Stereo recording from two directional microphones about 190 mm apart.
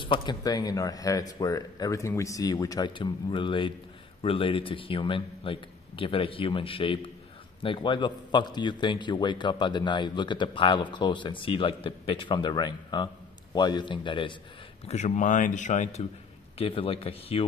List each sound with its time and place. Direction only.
0.0 s a man's voice: 25° left (ahead or behind)
14.9 s a man's voice: 35° left (ahead or behind)